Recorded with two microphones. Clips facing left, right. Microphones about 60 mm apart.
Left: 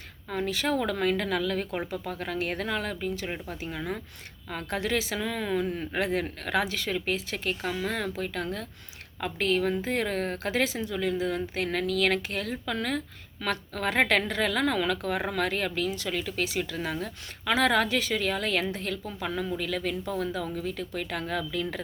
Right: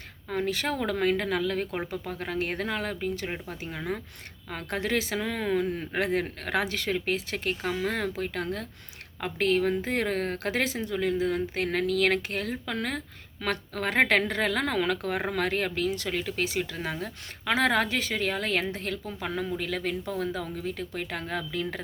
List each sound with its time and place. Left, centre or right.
0.3 s a woman's voice: right